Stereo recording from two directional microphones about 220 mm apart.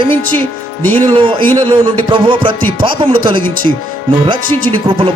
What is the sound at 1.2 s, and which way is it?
Speech, 20° right (ahead or behind).